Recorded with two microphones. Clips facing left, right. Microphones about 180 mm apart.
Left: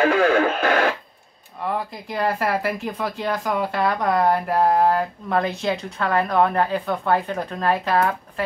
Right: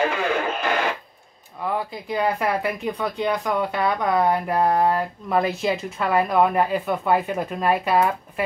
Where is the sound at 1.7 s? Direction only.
Centre (ahead or behind).